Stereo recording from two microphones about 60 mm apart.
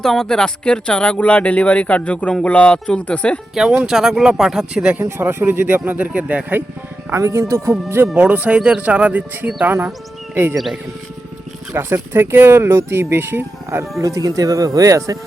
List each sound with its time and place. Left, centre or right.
0.0 s speech: centre
3.5 s speech: centre
5.2 s speech: right
7.2 s speech: right
8.1 s speech: right
10.3 s speech: right
11.7 s speech: right
14.0 s speech: right